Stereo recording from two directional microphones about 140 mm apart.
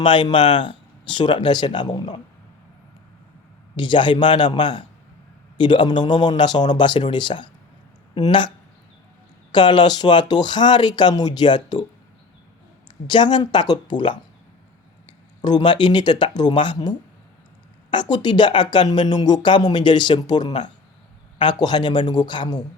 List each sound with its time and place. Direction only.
0.0 s speech: 40° left (ahead or behind)
3.8 s speech: 35° left (ahead or behind)
9.5 s speech: 35° left (ahead or behind)
13.1 s speech: 35° left (ahead or behind)
15.4 s speech: 30° left (ahead or behind)
17.9 s speech: 30° left (ahead or behind)